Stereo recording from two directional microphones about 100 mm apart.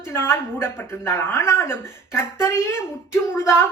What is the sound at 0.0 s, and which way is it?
A woman's voice, 25° left (ahead or behind).